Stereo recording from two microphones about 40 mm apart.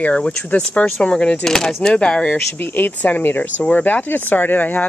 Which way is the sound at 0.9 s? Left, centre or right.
Centre.